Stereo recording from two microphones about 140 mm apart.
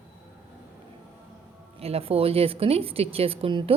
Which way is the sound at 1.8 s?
45° right (ahead or behind).